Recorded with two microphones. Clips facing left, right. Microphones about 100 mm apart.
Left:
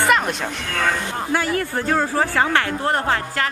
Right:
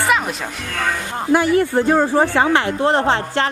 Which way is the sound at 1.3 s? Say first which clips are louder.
Right 8 dB; 20° right (ahead or behind).